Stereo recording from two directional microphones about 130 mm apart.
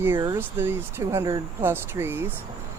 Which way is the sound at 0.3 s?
15° right (ahead or behind).